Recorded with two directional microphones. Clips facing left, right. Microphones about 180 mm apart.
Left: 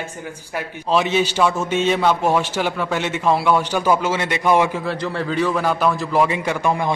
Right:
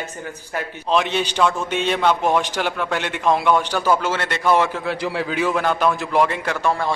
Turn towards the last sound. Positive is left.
turn(degrees=15)  # may be behind; listen again after turning